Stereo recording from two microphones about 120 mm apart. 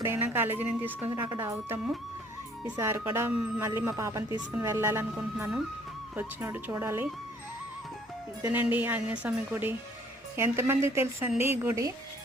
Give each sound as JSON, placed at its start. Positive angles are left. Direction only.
{"t": 0.0, "sound": "a woman's voice", "side_deg": -20}
{"t": 6.1, "sound": "speech", "side_deg": -20}
{"t": 8.6, "sound": "a woman's voice", "side_deg": -15}